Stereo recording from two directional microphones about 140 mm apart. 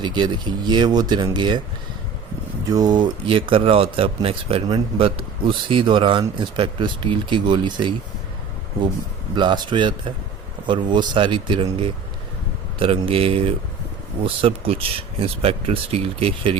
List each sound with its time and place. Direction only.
0.0 s speech: 35° right (ahead or behind)
2.6 s speech: 30° right (ahead or behind)
9.3 s speech: 35° right (ahead or behind)
13.1 s speech: 40° right (ahead or behind)